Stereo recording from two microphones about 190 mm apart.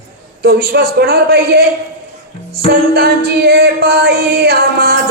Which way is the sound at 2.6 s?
55° right (ahead or behind).